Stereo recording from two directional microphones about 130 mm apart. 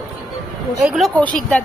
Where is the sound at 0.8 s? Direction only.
Centre (ahead or behind).